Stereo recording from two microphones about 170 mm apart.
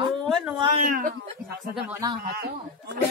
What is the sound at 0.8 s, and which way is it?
Speech, 55° right (ahead or behind).